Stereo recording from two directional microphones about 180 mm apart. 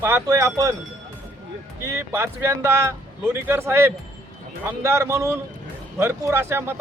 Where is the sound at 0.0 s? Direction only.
15° right (ahead or behind).